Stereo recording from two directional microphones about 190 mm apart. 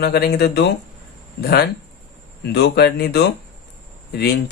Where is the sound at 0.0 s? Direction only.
55° left (ahead or behind).